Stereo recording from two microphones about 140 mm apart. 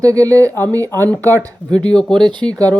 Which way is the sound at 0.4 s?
15° left (ahead or behind).